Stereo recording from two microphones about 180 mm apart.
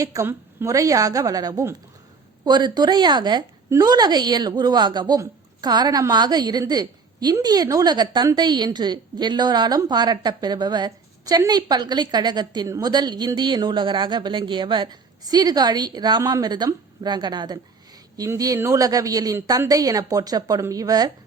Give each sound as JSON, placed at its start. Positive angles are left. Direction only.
{"t": 0.0, "sound": "a woman's voice", "side_deg": -15}